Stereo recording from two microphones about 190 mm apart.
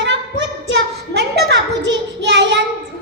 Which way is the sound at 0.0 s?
70° right (ahead or behind).